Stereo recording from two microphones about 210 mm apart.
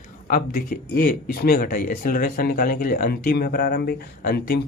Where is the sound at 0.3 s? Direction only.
40° left (ahead or behind).